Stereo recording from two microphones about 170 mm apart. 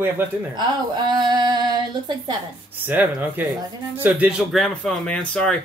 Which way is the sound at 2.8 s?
10° right (ahead or behind).